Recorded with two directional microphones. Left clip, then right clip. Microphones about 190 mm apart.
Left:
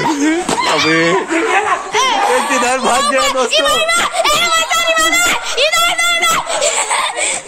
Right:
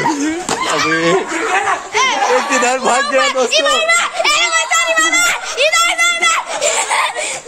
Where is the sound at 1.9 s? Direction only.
30° left (ahead or behind).